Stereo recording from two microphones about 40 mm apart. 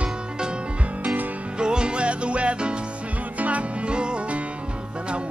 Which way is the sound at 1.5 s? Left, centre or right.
Right.